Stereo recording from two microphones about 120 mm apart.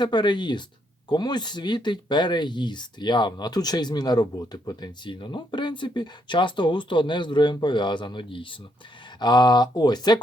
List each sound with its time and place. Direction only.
0.0 s speech: 40° left (ahead or behind)